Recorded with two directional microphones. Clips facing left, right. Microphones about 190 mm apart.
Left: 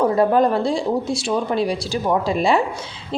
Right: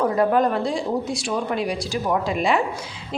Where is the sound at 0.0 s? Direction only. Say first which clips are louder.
Left 3 dB; 30° left (ahead or behind).